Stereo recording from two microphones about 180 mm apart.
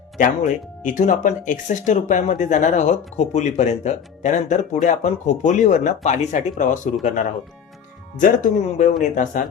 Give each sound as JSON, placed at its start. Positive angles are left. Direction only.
{"t": 0.2, "sound": "speech", "side_deg": 45}
{"t": 8.2, "sound": "speech", "side_deg": 45}